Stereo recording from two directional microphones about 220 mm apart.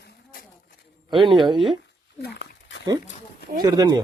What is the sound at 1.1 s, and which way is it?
Speech, 20° right (ahead or behind).